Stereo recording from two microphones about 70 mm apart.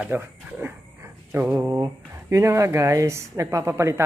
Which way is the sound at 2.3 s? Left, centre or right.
Right.